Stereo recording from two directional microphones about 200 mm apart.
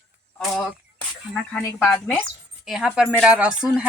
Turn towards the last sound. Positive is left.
turn(degrees=-5)  # may be behind; listen again after turning